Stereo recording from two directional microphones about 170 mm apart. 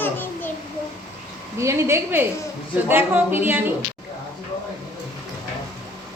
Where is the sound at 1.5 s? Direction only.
15° right (ahead or behind).